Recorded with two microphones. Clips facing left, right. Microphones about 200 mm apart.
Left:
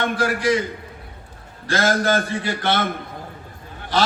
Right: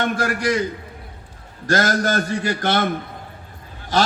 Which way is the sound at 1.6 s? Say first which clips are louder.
Even; 45° right (ahead or behind).